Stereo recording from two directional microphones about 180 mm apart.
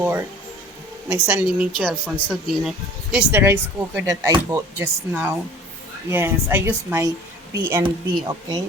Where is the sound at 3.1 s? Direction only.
15° right (ahead or behind).